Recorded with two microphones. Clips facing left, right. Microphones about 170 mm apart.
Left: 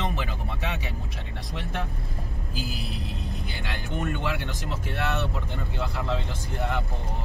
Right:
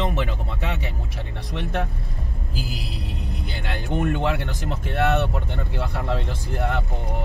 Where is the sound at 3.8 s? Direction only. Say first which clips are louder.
Right 7 dB; 65° right (ahead or behind).